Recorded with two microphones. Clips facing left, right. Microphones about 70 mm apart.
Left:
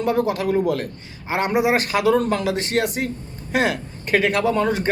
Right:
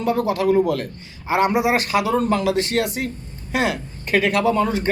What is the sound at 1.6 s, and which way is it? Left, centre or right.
Speech, left.